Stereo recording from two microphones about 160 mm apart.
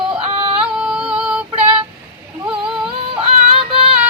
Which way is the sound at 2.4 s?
5° right (ahead or behind).